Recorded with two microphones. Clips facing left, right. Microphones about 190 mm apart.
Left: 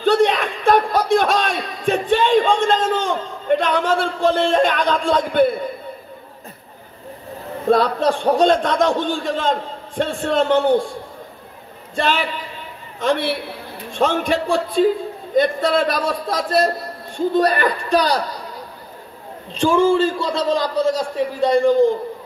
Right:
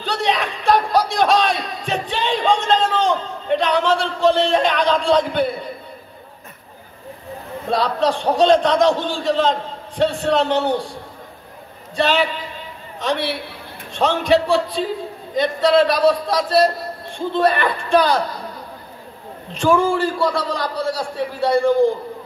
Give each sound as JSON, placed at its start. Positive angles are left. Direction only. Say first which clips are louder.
{"t": 0.0, "sound": "a sound", "louder": "left 6 dB", "side_deg": 50}
{"t": 7.6, "sound": "a man's voice", "louder": "left 3 dB", "side_deg": 50}
{"t": 11.9, "sound": "a man's voice", "louder": "right 2 dB", "side_deg": 50}
{"t": 19.5, "sound": "a man's voice", "louder": "left 2 dB", "side_deg": 30}